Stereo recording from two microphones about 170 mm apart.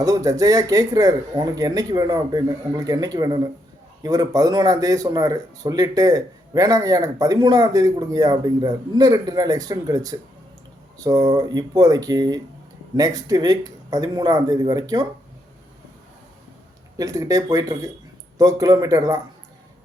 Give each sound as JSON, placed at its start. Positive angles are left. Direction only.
{"t": 0.0, "sound": "speech", "side_deg": -20}
{"t": 17.0, "sound": "speech", "side_deg": -20}